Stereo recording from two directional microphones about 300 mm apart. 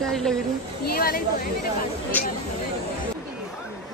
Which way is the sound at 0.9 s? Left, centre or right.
Left.